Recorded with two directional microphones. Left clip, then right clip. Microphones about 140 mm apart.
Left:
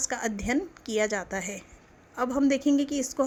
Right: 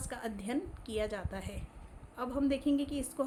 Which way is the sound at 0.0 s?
65° left (ahead or behind).